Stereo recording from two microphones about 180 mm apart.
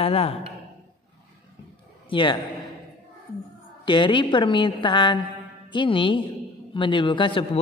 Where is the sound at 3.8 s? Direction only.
25° left (ahead or behind).